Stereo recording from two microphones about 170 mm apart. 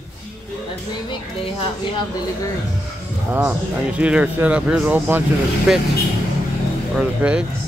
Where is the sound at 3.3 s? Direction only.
10° right (ahead or behind).